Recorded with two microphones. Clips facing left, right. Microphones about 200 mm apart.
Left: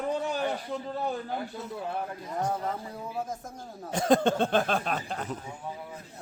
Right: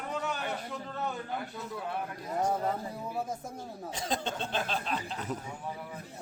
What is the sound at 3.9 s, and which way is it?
Speech, 50° left (ahead or behind).